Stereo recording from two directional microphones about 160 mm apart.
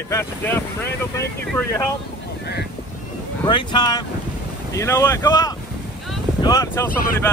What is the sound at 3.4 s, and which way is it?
Speech, 30° left (ahead or behind).